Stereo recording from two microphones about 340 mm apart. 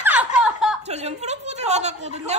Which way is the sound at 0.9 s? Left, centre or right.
Centre.